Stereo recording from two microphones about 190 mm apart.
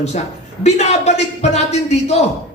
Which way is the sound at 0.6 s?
35° left (ahead or behind).